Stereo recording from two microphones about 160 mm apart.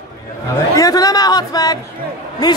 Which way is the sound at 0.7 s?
20° left (ahead or behind).